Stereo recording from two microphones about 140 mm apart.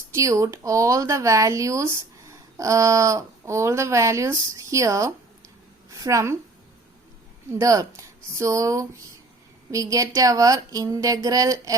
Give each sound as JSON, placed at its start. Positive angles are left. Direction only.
{"t": 0.1, "sound": "a woman's voice", "side_deg": -20}
{"t": 7.6, "sound": "speech", "side_deg": -25}